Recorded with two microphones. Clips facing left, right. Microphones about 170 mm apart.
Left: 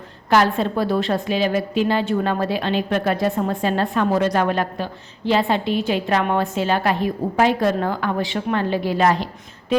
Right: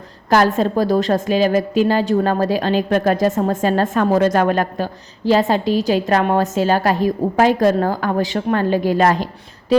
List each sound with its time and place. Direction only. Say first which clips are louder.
0.3 s a woman's voice: right 3 dB; 40° right (ahead or behind)